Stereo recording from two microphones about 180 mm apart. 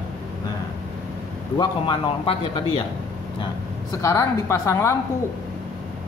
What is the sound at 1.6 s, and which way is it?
Speech, 25° left (ahead or behind).